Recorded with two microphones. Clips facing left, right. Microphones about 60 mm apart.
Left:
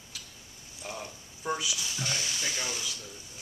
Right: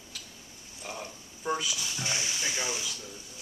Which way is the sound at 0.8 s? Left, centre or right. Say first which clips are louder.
Even; centre.